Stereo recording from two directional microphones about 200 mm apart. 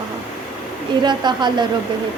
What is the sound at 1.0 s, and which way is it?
Speech, 20° right (ahead or behind).